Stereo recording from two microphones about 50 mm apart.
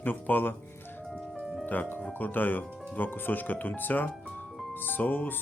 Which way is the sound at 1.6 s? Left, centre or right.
Left.